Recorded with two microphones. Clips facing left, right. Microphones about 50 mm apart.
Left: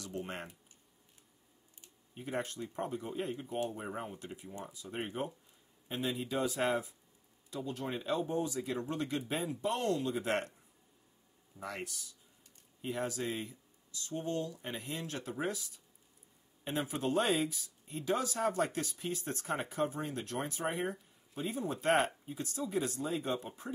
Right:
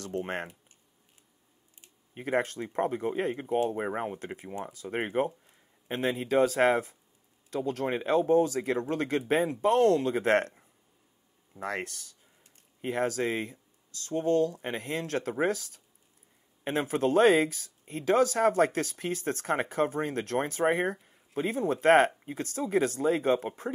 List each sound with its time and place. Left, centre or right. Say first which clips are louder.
0.0 s speech: right 8 dB; right
2.1 s speech: right 9 dB; right